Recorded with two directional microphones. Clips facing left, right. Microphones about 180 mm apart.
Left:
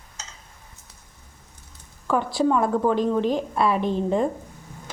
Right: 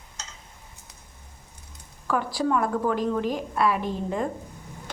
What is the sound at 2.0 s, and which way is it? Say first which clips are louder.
A woman's voice: left 4 dB; 25° left (ahead or behind).